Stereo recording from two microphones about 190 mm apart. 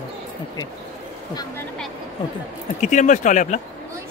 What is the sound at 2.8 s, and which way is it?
Speech, 40° left (ahead or behind).